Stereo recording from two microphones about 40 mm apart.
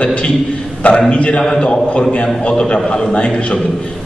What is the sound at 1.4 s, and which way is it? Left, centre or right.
Speech, centre.